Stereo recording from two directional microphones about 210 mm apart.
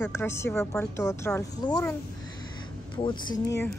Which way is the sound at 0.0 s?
10° left (ahead or behind).